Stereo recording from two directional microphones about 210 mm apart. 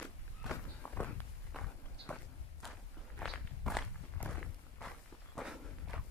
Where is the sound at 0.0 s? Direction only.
5° left (ahead or behind).